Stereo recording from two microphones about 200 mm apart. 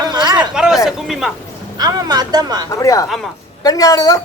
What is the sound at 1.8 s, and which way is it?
Speech, 20° right (ahead or behind).